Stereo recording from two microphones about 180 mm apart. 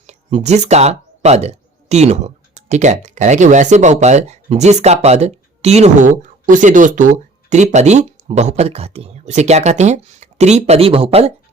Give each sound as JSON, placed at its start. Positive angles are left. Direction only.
{"t": 0.1, "sound": "speech", "side_deg": -40}